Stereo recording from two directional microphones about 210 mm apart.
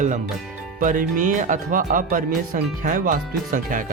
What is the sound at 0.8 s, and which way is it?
Speech, 40° right (ahead or behind).